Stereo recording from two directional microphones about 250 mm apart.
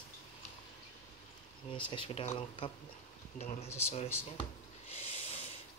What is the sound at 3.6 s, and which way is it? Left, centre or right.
Speech, centre.